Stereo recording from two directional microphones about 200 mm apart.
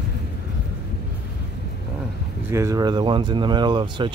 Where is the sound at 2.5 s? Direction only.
15° right (ahead or behind).